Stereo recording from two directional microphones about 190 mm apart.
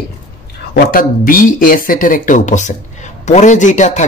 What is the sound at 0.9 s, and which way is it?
Speech, 45° left (ahead or behind).